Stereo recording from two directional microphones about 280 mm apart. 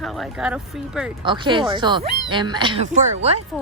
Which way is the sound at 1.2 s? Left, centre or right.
Centre.